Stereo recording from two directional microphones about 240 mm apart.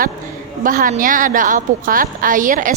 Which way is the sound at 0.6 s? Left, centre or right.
Right.